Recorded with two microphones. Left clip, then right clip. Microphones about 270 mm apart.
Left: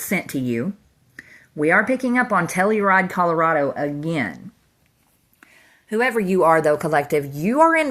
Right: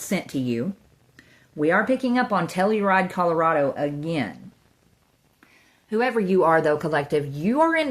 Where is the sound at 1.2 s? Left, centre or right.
Centre.